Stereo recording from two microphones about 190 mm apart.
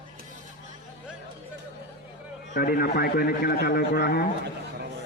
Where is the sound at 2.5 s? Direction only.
55° left (ahead or behind).